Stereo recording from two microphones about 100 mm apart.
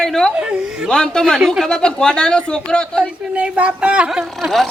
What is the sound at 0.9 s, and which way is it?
Speech, 5° left (ahead or behind).